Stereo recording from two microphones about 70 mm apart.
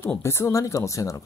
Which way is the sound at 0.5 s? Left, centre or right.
Left.